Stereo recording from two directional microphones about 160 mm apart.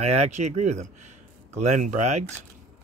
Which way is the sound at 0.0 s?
45° right (ahead or behind).